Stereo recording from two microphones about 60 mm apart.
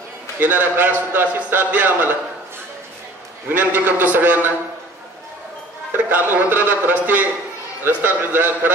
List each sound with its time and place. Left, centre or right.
0.4 s a man's voice: right
3.4 s a man's voice: right
6.0 s a man's voice: right